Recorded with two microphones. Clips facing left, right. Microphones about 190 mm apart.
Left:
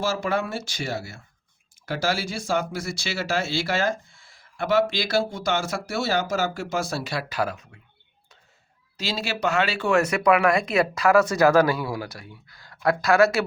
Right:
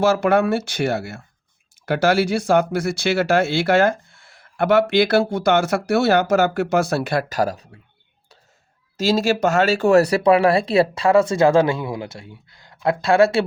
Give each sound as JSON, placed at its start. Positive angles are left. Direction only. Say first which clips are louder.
{"t": 0.0, "sound": "speech", "louder": "right 9 dB", "side_deg": -65}
{"t": 9.0, "sound": "speech", "louder": "right 10 dB", "side_deg": -45}